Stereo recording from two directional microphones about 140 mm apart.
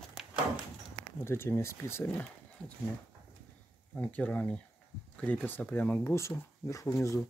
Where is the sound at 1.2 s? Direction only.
15° left (ahead or behind).